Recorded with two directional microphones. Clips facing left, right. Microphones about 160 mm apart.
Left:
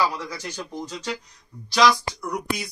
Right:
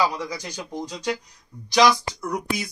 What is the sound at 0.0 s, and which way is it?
Speech, 15° right (ahead or behind).